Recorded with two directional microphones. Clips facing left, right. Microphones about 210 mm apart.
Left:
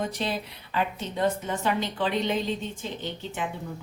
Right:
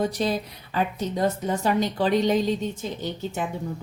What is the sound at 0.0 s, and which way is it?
Speech, 40° right (ahead or behind).